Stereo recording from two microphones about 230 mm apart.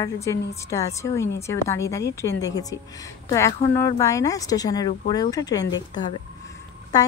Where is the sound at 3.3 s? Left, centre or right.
Centre.